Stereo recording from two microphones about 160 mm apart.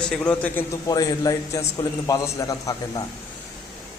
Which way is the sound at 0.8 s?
25° left (ahead or behind).